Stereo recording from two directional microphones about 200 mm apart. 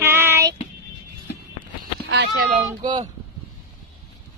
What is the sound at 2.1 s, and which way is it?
Speech, 55° right (ahead or behind).